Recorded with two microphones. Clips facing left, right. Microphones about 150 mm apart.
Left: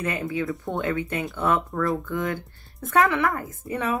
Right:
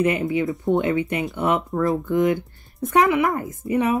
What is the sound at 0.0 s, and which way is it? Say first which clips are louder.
Speech: right 7 dB; 20° right (ahead or behind).